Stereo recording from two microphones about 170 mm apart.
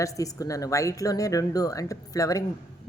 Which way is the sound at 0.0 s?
20° left (ahead or behind).